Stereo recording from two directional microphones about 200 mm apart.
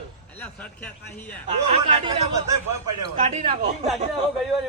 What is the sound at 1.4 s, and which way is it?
Speech, 30° right (ahead or behind).